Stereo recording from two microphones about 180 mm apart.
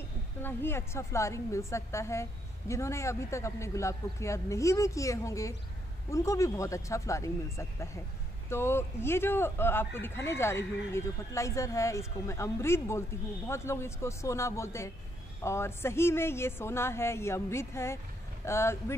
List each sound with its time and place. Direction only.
0.4 s speech: 10° left (ahead or behind)